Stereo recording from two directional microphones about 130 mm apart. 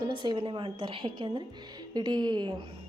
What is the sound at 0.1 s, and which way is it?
A woman's voice, 40° right (ahead or behind).